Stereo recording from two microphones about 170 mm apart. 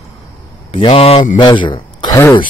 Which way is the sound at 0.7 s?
35° left (ahead or behind).